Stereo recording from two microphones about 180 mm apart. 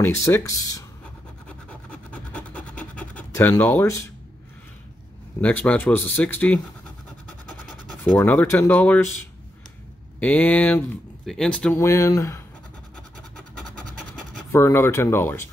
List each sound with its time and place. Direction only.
0.0 s speech: 15° left (ahead or behind)
1.7 s a sound: 5° left (ahead or behind)
2.8 s scratch: 5° left (ahead or behind)
5.4 s speech: 10° left (ahead or behind)
8.0 s speech: 10° left (ahead or behind)
10.2 s speech: 10° left (ahead or behind)
11.8 s speech: 15° left (ahead or behind)
14.5 s speech: 15° left (ahead or behind)